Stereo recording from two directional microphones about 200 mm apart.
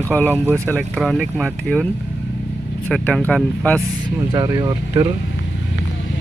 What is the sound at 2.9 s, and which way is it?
Speech, 5° left (ahead or behind).